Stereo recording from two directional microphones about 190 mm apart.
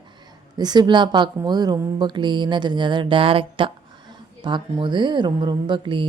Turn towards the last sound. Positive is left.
turn(degrees=-25)  # may be behind; listen again after turning